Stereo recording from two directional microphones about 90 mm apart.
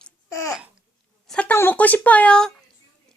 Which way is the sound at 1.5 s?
30° left (ahead or behind).